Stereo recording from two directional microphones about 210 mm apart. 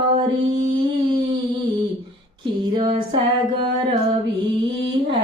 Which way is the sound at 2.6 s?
20° right (ahead or behind).